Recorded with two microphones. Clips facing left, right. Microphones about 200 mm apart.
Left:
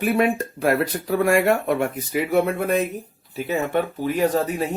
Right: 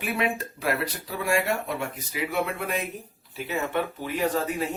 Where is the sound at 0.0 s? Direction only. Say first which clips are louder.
Left 8 dB; 50° left (ahead or behind).